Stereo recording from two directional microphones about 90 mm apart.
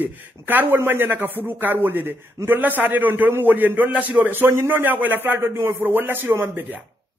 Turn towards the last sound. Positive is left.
turn(degrees=-20)  # may be behind; listen again after turning